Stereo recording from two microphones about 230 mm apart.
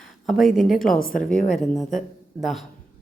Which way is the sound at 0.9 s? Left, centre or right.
Left.